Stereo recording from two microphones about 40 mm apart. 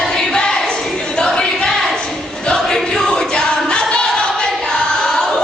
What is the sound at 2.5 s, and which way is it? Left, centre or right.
Choir, centre.